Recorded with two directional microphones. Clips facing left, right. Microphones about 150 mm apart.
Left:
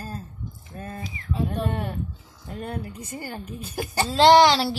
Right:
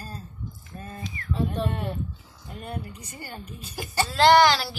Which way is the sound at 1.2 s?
20° left (ahead or behind).